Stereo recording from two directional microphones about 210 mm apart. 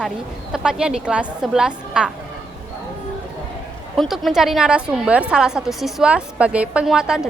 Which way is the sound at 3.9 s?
Centre (ahead or behind).